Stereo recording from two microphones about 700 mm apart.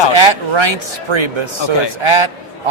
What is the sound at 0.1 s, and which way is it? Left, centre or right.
Speech, right.